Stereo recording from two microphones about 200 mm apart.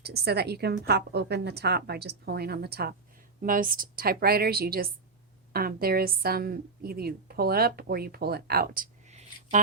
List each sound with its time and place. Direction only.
0.0 s a woman's voice: 55° right (ahead or behind); by 9.6 s 35° right (ahead or behind)